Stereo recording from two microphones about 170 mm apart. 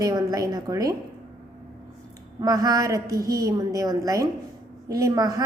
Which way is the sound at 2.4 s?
20° right (ahead or behind).